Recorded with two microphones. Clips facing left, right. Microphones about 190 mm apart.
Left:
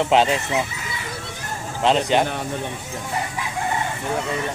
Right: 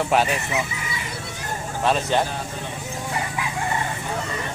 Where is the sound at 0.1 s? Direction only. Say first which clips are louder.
Left 3 dB; 20° left (ahead or behind).